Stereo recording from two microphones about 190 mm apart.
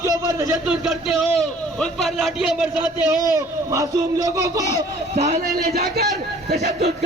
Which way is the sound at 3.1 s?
15° right (ahead or behind).